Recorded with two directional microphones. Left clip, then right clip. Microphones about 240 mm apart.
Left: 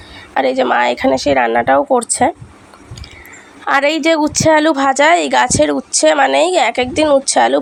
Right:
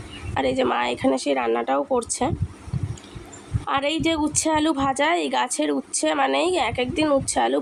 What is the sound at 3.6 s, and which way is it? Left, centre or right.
A woman's voice, left.